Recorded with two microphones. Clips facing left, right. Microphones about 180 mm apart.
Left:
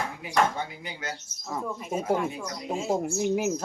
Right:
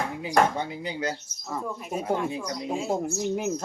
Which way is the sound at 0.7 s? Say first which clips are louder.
Right 7 dB; 30° right (ahead or behind).